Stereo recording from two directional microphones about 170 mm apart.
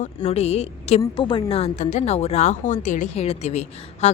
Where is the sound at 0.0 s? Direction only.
40° left (ahead or behind).